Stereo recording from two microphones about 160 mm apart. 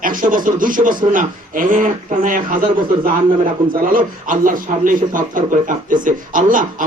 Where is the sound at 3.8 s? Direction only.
60° right (ahead or behind).